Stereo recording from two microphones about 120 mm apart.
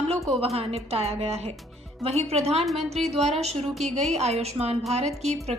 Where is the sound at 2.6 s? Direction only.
Centre (ahead or behind).